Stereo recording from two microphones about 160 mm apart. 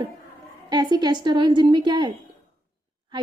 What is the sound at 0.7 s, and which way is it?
A woman's voice, 25° right (ahead or behind).